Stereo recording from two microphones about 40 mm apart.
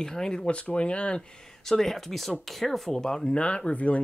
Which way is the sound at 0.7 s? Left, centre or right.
Left.